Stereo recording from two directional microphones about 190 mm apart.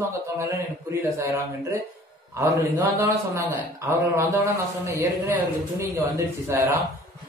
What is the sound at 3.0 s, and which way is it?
Speech, 15° right (ahead or behind).